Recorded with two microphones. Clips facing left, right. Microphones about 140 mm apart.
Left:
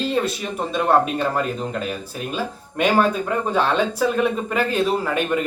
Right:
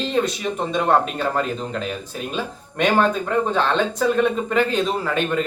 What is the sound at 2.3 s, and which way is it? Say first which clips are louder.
Speech: left 2 dB; 5° left (ahead or behind).